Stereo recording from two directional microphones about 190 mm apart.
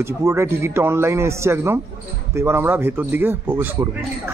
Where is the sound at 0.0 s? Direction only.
15° right (ahead or behind).